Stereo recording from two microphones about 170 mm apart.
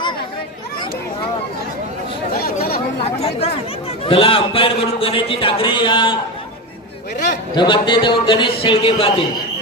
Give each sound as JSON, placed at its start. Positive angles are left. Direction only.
{"t": 2.4, "sound": "chatter", "side_deg": 60}
{"t": 3.0, "sound": "a man's voice", "side_deg": 35}
{"t": 7.5, "sound": "a man's voice", "side_deg": 25}